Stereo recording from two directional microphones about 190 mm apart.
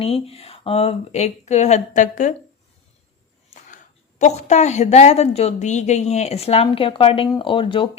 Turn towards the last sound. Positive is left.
turn(degrees=25)  # may be behind; listen again after turning